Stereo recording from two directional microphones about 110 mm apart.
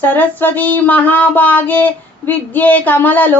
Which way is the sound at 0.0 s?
15° left (ahead or behind).